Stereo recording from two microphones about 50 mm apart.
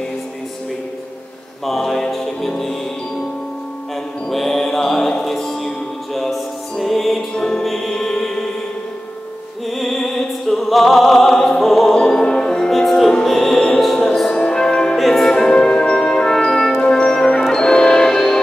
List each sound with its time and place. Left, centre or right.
1.7 s music: centre
4.3 s music: centre
9.8 s music: centre
14.3 s music: centre
15.0 s brass instrument: centre
16.8 s music: centre